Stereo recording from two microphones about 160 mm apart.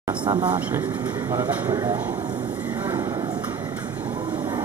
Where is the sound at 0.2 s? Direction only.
30° right (ahead or behind).